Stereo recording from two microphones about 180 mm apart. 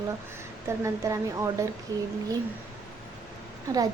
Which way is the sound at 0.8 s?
15° right (ahead or behind).